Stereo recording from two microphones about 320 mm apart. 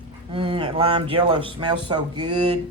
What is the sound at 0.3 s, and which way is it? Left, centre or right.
Speech, centre.